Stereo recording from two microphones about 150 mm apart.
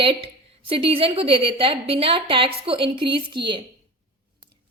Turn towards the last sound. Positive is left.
turn(degrees=-30)  # may be behind; listen again after turning